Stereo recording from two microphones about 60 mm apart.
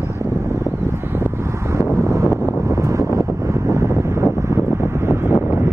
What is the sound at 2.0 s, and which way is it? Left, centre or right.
Wind noise, right.